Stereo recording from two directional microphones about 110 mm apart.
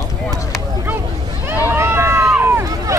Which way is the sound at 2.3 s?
15° right (ahead or behind).